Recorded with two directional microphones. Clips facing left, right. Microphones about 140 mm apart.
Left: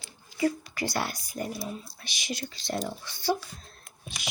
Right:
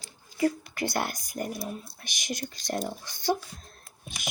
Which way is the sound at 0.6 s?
55° right (ahead or behind).